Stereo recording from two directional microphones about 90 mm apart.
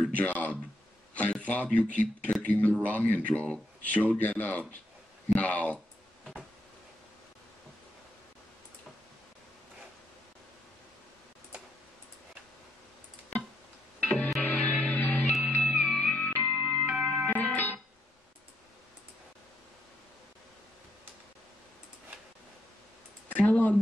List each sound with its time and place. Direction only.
0.0 s speech: 15° left (ahead or behind)
14.0 s music: 10° left (ahead or behind)
16.9 s music: 5° right (ahead or behind)
17.3 s music: 20° left (ahead or behind)
23.3 s a sound: 15° left (ahead or behind)